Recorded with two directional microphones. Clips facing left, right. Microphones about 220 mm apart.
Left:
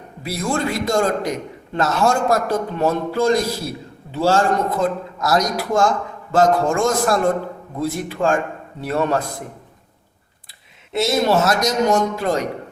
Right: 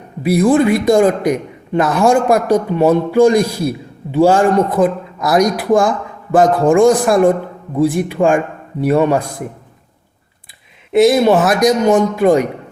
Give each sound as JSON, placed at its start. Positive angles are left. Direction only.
{"t": 0.2, "sound": "a man's voice", "side_deg": -15}
{"t": 10.9, "sound": "a man's voice", "side_deg": -15}